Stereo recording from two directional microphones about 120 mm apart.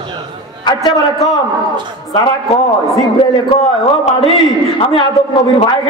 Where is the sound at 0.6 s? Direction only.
35° left (ahead or behind).